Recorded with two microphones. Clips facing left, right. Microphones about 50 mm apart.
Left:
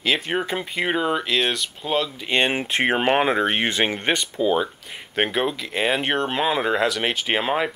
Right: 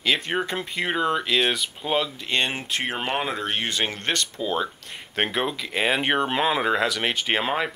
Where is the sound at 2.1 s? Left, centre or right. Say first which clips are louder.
Left 4 dB; centre.